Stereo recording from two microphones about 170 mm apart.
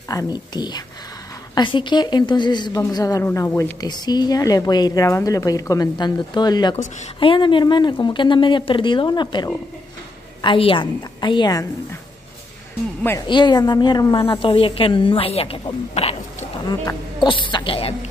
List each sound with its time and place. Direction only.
0.1 s a woman's voice: 20° left (ahead or behind)
13.3 s a woman's voice: 25° left (ahead or behind)
16.6 s a woman's voice: 25° left (ahead or behind)